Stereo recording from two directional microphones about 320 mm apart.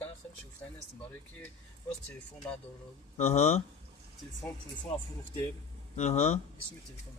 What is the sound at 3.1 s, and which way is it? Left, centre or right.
Speech, left.